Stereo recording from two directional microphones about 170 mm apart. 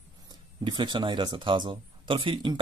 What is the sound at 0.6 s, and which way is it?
Speech, 30° right (ahead or behind).